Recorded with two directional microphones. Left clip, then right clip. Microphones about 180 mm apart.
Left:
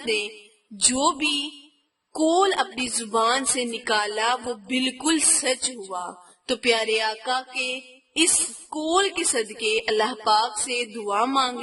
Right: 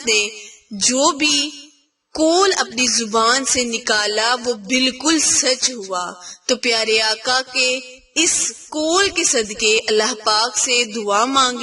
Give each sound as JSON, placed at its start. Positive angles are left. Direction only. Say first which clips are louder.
{"t": 0.0, "sound": "a woman's voice", "louder": "right 8 dB", "side_deg": -20}